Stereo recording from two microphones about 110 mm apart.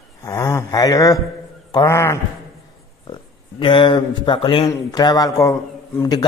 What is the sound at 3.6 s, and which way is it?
Speech, 50° left (ahead or behind).